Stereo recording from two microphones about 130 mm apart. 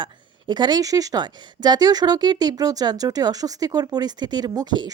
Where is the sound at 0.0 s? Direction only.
35° right (ahead or behind).